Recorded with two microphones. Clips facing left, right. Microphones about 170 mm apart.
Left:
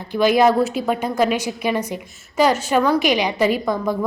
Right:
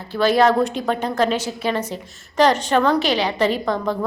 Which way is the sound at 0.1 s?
15° left (ahead or behind).